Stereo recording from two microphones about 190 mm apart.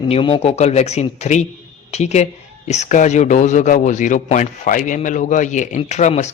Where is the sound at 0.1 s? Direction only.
30° left (ahead or behind).